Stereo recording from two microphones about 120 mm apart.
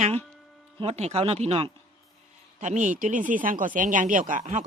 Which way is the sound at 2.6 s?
90° right.